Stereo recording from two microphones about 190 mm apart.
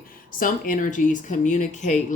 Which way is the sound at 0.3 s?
45° left (ahead or behind).